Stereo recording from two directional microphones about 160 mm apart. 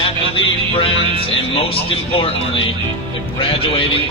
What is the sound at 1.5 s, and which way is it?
Speech, 35° left (ahead or behind).